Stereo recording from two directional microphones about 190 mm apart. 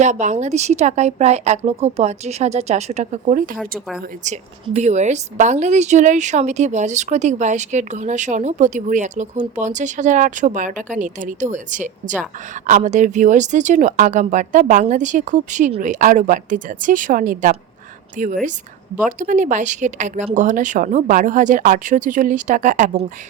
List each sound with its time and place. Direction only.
0.0 s a woman's voice: 40° right (ahead or behind)